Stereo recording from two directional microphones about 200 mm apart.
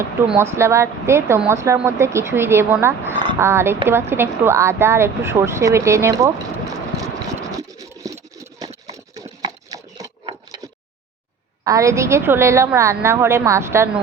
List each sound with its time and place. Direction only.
0.3 s speech: 10° right (ahead or behind)
6.9 s engine: 15° right (ahead or behind)
8.0 s a sound: 15° right (ahead or behind)
11.6 s speech: 15° right (ahead or behind)